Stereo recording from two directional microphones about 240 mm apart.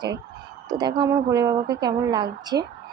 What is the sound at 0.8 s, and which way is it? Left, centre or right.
A woman's voice, centre.